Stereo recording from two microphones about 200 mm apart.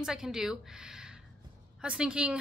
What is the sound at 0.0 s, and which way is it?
A woman's voice, 5° right (ahead or behind).